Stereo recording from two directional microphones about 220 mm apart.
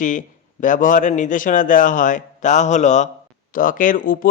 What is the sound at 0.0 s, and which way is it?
Speech, 35° left (ahead or behind).